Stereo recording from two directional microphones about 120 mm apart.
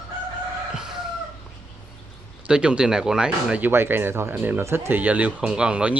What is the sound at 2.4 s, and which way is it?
Speech, 5° right (ahead or behind).